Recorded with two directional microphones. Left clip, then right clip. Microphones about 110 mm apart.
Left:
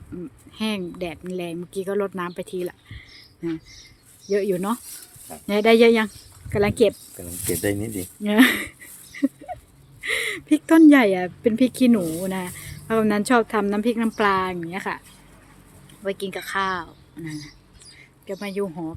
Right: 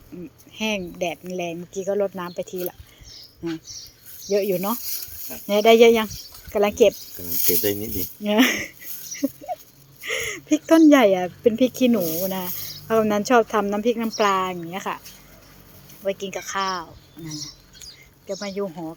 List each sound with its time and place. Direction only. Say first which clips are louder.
0.1 s a sound: left 2 dB; 25° left (ahead or behind)
0.5 s speech: right 2 dB; 20° left (ahead or behind)
1.8 s speech: right 2 dB; 35° left (ahead or behind)
4.3 s speech: right 1 dB; 20° left (ahead or behind)
7.6 s speech: left 3 dB; 80° left
8.2 s speech: left 1 dB; 25° left (ahead or behind)
9.1 s dog: left 1 dB; 30° left (ahead or behind)
10.0 s speech: left 2 dB; 25° left (ahead or behind)
12.2 s speech: right 2 dB; 30° left (ahead or behind)
16.0 s speech: right 1 dB; 25° left (ahead or behind)